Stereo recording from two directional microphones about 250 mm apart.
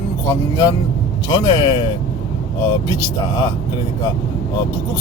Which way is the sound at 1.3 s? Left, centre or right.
Centre.